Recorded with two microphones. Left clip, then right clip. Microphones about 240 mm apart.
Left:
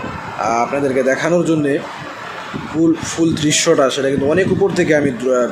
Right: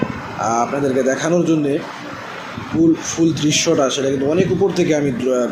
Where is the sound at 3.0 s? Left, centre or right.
Left.